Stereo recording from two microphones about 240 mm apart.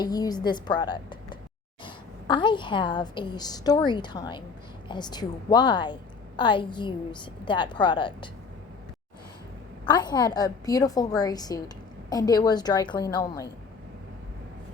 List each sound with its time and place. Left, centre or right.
0.0 s a woman's voice: centre
9.8 s a woman's voice: centre